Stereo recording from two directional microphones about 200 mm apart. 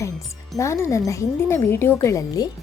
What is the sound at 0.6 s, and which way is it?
A woman's voice, 15° left (ahead or behind).